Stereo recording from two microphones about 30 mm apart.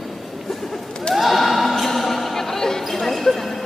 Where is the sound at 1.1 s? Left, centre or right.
Centre.